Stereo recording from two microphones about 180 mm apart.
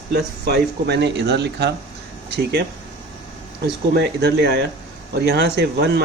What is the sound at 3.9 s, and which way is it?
Speech, 65° right (ahead or behind).